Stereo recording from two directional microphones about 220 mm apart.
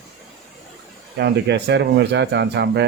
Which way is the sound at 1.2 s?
50° right (ahead or behind).